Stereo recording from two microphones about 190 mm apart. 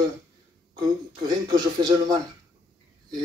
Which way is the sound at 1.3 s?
20° right (ahead or behind).